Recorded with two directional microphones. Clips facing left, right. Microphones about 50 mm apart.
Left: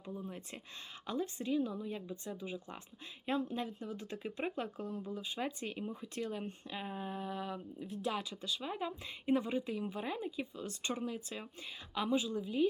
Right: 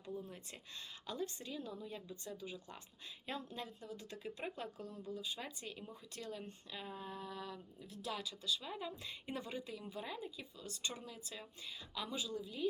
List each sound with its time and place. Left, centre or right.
0.0 s speech: left